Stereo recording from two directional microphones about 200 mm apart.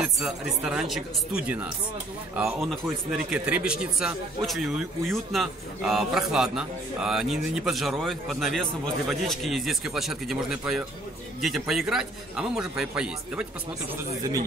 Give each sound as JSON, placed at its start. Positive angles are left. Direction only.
{"t": 0.0, "sound": "a man's voice", "side_deg": -5}